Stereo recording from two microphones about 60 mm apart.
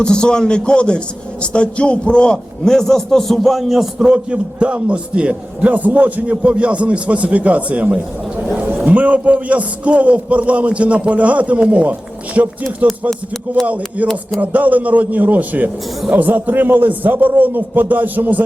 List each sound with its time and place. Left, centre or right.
0.0 s a man's voice: centre; by 12.5 s right
13.7 s a man's voice: right